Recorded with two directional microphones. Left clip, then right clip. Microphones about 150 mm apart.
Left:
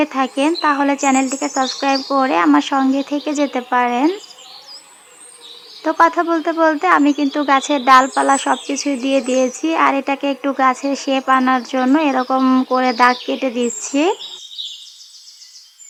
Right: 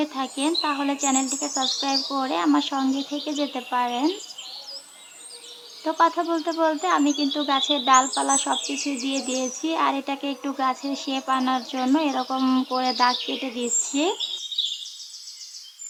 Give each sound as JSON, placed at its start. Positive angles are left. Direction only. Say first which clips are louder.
{"t": 0.0, "sound": "speech", "louder": "left 9 dB", "side_deg": 35}
{"t": 5.8, "sound": "speech", "louder": "left 7 dB", "side_deg": 35}
{"t": 9.1, "sound": "a sound", "louder": "left 14 dB", "side_deg": 30}
{"t": 9.6, "sound": "speech", "louder": "left 6 dB", "side_deg": 30}
{"t": 12.4, "sound": "a sound", "louder": "left 8 dB", "side_deg": 20}
{"t": 12.7, "sound": "speech", "louder": "left 8 dB", "side_deg": 30}